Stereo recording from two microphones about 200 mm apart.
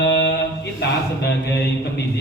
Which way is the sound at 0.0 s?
60° left (ahead or behind).